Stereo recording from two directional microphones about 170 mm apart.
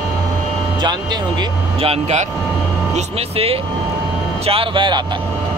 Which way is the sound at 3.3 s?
35° right (ahead or behind).